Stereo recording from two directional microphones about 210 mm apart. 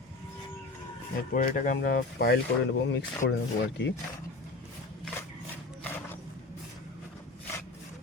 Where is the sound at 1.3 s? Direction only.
40° left (ahead or behind).